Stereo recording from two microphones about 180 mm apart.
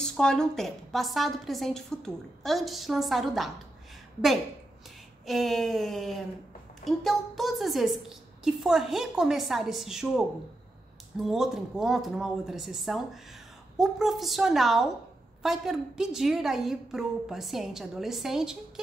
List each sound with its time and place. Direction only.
0.0 s a woman's voice: 5° left (ahead or behind)
5.2 s a woman's voice: centre (ahead or behind)